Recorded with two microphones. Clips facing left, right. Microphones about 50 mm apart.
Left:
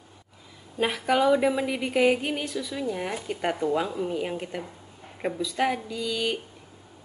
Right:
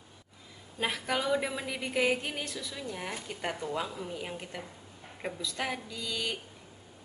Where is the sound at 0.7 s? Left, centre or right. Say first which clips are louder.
Left 8 dB; centre.